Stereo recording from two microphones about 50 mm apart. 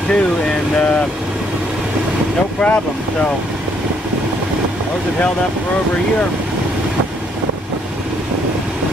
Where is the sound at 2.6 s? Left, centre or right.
Centre.